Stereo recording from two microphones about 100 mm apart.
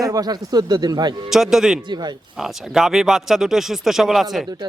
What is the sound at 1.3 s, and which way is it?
Speech, 5° right (ahead or behind).